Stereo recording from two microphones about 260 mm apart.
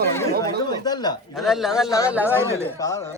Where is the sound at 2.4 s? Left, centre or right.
Centre.